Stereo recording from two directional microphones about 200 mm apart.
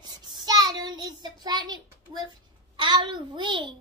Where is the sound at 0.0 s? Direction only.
20° right (ahead or behind).